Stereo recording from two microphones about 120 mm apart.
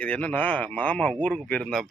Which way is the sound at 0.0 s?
10° left (ahead or behind).